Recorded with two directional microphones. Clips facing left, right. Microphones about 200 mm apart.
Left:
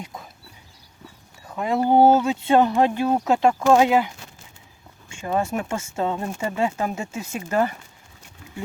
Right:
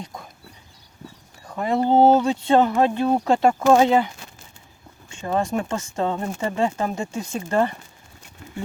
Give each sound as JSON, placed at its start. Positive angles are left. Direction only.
{"t": 0.0, "sound": "speech", "side_deg": 5}
{"t": 1.5, "sound": "speech", "side_deg": 0}
{"t": 3.2, "sound": "speech", "side_deg": 0}